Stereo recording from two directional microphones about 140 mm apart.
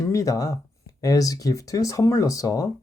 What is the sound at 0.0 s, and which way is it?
Speech, 25° left (ahead or behind).